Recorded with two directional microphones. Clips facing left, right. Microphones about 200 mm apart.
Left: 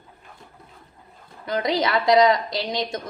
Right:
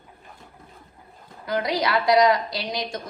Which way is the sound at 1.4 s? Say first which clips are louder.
Left 1 dB; 25° left (ahead or behind).